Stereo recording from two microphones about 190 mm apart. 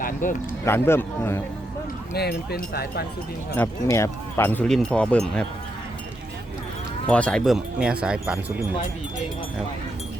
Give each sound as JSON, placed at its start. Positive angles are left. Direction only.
{"t": 0.0, "sound": "speech", "side_deg": 45}
{"t": 0.6, "sound": "speech", "side_deg": 10}
{"t": 2.1, "sound": "speech", "side_deg": 55}
{"t": 3.6, "sound": "speech", "side_deg": 15}
{"t": 7.1, "sound": "speech", "side_deg": 5}